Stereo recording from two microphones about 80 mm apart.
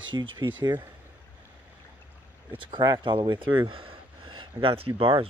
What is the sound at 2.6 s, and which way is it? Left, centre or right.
Speech, right.